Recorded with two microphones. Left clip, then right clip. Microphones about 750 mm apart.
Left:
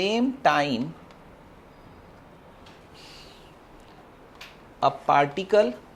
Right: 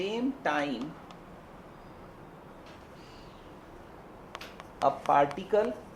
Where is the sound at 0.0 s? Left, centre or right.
Left.